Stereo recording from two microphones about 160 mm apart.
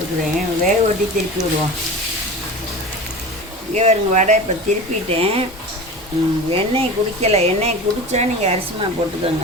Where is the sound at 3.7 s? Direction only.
45° right (ahead or behind).